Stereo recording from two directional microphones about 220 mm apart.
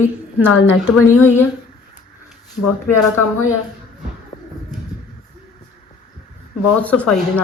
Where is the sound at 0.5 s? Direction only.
70° left (ahead or behind).